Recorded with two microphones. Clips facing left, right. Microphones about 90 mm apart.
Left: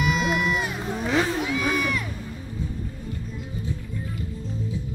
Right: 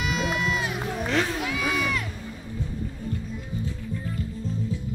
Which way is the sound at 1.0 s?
Centre (ahead or behind).